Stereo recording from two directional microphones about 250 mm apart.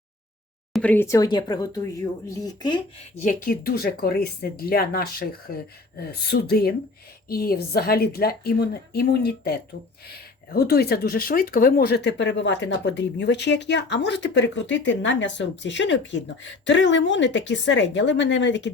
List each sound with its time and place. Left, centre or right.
0.7 s speech: centre
3.2 s a woman's voice: left